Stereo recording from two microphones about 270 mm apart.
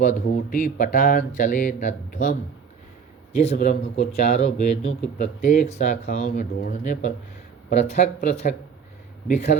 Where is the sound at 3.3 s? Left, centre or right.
Left.